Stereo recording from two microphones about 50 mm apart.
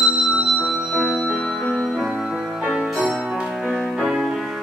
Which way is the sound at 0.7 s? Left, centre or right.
Centre.